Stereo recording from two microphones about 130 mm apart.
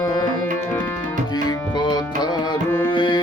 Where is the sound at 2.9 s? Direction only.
40° left (ahead or behind).